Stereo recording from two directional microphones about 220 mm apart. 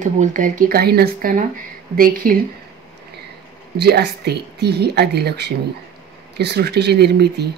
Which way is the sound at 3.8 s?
50° right (ahead or behind).